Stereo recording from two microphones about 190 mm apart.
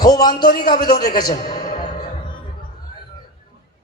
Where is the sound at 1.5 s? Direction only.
20° left (ahead or behind).